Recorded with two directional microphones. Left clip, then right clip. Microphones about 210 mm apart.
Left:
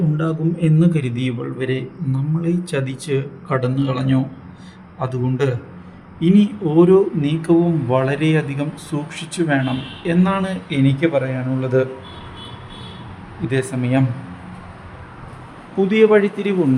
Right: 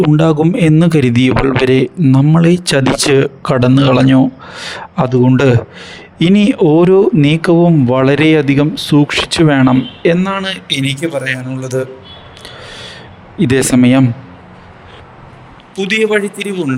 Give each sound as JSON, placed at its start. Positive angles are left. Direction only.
{"t": 0.2, "sound": "a man's voice", "side_deg": -55}
{"t": 11.0, "sound": "a man's voice", "side_deg": 0}
{"t": 13.5, "sound": "a man's voice", "side_deg": -50}
{"t": 16.0, "sound": "a man's voice", "side_deg": 0}